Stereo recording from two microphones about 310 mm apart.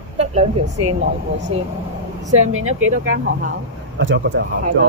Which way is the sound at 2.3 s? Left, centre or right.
Right.